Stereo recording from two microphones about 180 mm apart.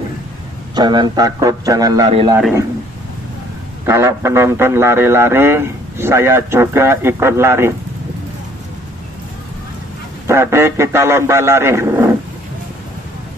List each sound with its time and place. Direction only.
0.7 s a man's voice: 25° right (ahead or behind)
3.8 s speech: 15° right (ahead or behind)
10.2 s speech: 15° right (ahead or behind)